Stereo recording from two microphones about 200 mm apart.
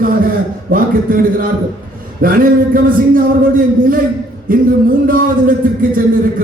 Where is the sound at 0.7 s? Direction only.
45° right (ahead or behind).